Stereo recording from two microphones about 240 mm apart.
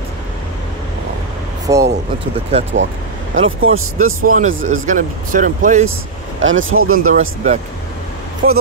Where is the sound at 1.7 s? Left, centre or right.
Centre.